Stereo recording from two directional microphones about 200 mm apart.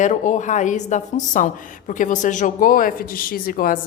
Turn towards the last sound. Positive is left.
turn(degrees=45)  # may be behind; listen again after turning